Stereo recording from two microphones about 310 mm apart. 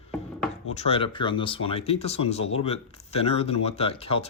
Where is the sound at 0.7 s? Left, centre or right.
Centre.